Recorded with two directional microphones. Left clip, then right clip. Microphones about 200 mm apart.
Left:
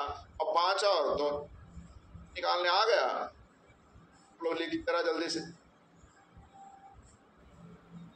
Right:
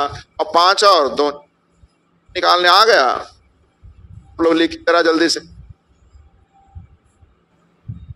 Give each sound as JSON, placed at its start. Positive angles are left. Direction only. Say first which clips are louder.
{"t": 0.0, "sound": "a man's voice", "louder": "right 14 dB", "side_deg": -55}
{"t": 2.3, "sound": "a man's voice", "louder": "right 17 dB", "side_deg": -55}
{"t": 4.4, "sound": "a man's voice", "louder": "right 19 dB", "side_deg": -55}